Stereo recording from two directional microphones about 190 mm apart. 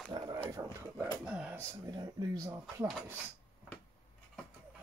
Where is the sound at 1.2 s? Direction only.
5° right (ahead or behind).